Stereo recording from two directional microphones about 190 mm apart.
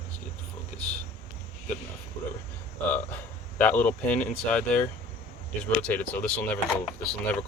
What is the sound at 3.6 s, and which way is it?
Speech, 10° left (ahead or behind).